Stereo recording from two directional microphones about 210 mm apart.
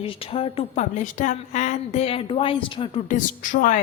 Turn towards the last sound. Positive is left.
turn(degrees=40)  # may be behind; listen again after turning